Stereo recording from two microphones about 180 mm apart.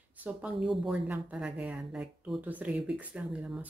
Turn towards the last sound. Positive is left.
turn(degrees=-5)  # may be behind; listen again after turning